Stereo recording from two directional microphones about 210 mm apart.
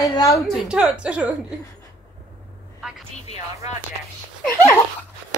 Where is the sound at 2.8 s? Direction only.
5° right (ahead or behind).